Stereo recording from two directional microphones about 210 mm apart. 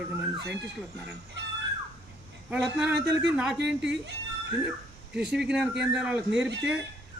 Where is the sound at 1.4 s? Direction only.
55° right (ahead or behind).